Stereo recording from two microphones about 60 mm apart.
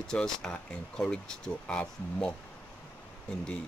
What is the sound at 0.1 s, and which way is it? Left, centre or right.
Speech, centre.